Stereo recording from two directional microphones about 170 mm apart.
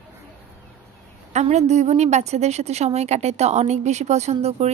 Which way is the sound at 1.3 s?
40° right (ahead or behind).